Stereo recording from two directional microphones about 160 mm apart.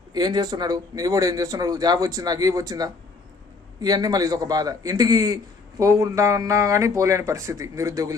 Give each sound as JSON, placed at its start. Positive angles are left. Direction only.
{"t": 0.1, "sound": "speech", "side_deg": -25}